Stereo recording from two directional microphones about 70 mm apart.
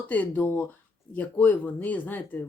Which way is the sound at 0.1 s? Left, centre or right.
Left.